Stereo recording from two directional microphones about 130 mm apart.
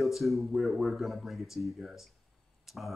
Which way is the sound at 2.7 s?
5° right (ahead or behind).